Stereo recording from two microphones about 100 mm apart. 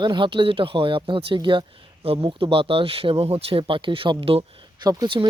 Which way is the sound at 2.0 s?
65° right (ahead or behind).